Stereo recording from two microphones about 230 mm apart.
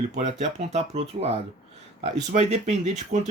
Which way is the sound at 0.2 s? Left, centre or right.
Right.